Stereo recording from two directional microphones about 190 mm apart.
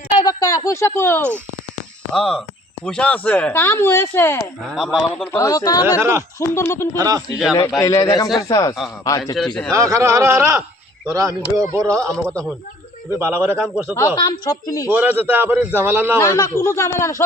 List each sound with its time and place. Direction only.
0.2 s a sound: 20° left (ahead or behind)
2.1 s a man's voice: 5° left (ahead or behind)
4.6 s a man's voice: centre (ahead or behind)
5.4 s a woman's voice: 20° left (ahead or behind)
6.0 s a man's voice: 10° right (ahead or behind)
6.4 s speech: 15° left (ahead or behind)
6.9 s speech: 20° right (ahead or behind)
7.8 s speech: 15° left (ahead or behind)
9.3 s a man's voice: centre (ahead or behind)
9.7 s a man's voice: 15° right (ahead or behind)
13.1 s a man's voice: 10° right (ahead or behind)
14.2 s a woman's voice: 20° left (ahead or behind)
14.8 s a man's voice: 10° right (ahead or behind)
16.2 s speech: 15° left (ahead or behind)